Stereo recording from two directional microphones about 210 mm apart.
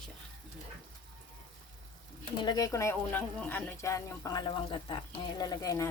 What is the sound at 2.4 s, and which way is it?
Speech, 20° left (ahead or behind).